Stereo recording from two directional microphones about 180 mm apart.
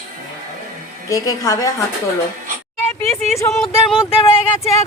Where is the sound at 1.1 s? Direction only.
20° left (ahead or behind).